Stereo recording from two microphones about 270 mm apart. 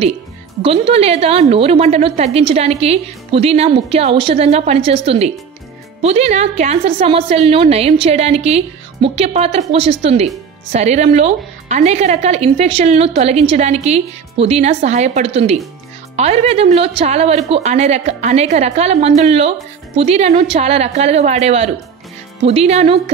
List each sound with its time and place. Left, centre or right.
0.6 s a woman's voice: right